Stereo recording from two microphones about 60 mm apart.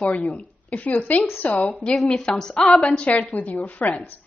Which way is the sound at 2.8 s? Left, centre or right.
Centre.